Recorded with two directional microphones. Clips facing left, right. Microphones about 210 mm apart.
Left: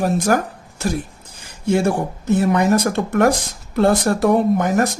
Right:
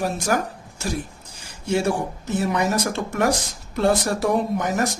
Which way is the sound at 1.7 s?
55° left (ahead or behind).